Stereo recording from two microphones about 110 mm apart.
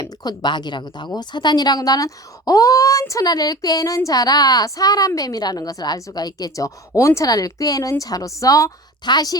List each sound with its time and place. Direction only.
0.0 s a woman's voice: 35° left (ahead or behind)